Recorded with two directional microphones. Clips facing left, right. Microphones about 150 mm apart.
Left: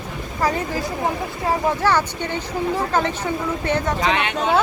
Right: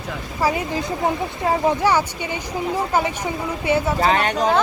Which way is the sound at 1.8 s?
10° right (ahead or behind).